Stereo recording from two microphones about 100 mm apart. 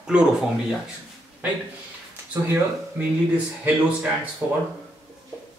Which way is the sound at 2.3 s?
20° right (ahead or behind).